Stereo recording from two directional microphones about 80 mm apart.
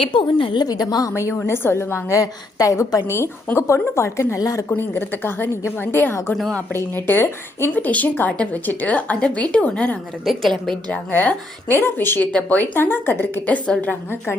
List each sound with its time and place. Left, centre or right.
0.0 s a woman's voice: left
1.1 s a woman's voice: left
4.4 s a woman's voice: left
4.8 s a woman's voice: left
6.3 s a woman's voice: centre
6.7 s a woman's voice: left
7.7 s a woman's voice: centre
10.2 s a woman's voice: centre
10.9 s a woman's voice: centre